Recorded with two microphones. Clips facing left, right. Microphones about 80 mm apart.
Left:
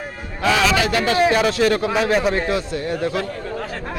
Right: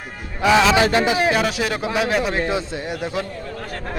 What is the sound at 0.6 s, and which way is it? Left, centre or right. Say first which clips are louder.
Speech: right 2 dB; right.